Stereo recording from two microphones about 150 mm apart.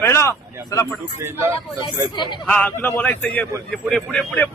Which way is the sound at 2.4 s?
10° left (ahead or behind).